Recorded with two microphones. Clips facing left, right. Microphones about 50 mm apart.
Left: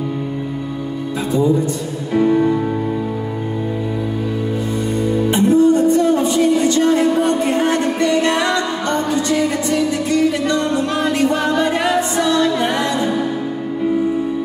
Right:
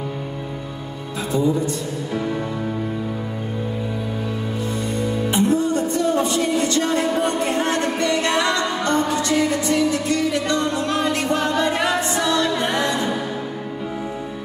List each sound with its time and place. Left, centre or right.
2.1 s music: centre
5.3 s music: left; by 8.5 s centre
8.5 s music: centre
10.7 s music: centre